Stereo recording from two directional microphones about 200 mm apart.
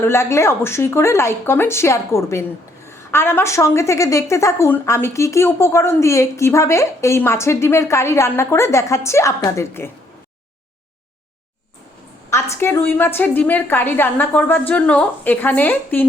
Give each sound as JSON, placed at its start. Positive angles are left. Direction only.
{"t": 0.0, "sound": "a woman's voice", "side_deg": 15}
{"t": 12.3, "sound": "a woman's voice", "side_deg": 15}